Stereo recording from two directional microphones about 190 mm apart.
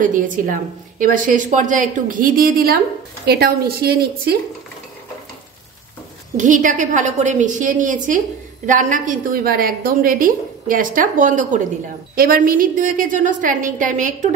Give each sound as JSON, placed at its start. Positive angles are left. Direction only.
{"t": 0.0, "sound": "a woman's voice", "side_deg": -45}
{"t": 6.3, "sound": "a woman's voice", "side_deg": -40}